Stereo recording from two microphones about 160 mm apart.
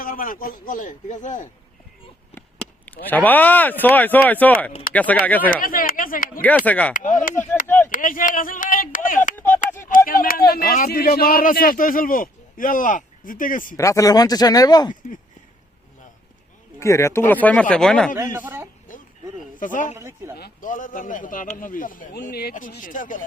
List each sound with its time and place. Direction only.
0.0 s a man's voice: 60° left (ahead or behind)
2.3 s a sound: 10° left (ahead or behind)
3.1 s speech: 10° left (ahead or behind)
5.5 s a man's voice: 60° left (ahead or behind)
6.7 s speech: 10° left (ahead or behind)
6.9 s a man's voice: 55° left (ahead or behind)
13.7 s speech: 20° left (ahead or behind)
16.8 s speech: 20° left (ahead or behind)
18.2 s speech: 15° right (ahead or behind)
19.5 s speech: 55° left (ahead or behind)
20.0 s speech: 15° right (ahead or behind)
20.4 s a man's voice: 55° left (ahead or behind); by 22.5 s 75° left (ahead or behind)
22.7 s a man's voice: 60° left (ahead or behind)